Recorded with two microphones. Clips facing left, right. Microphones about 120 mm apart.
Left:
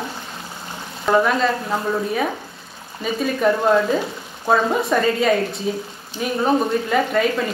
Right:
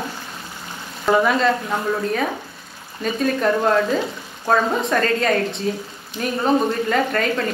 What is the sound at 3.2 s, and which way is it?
Speech, 5° left (ahead or behind).